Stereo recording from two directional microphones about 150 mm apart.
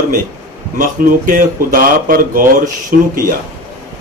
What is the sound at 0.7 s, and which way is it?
Speech, 70° right (ahead or behind).